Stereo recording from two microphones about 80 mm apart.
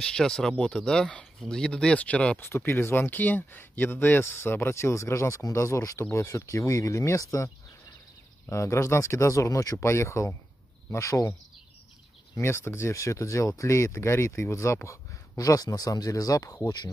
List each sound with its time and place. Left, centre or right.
0.0 s speech: centre
2.4 s speech: left
12.4 s speech: left